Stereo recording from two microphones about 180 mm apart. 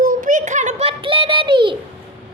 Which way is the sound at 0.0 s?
45° right (ahead or behind).